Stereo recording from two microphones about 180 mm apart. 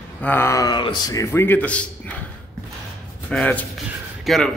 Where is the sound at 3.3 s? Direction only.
5° left (ahead or behind).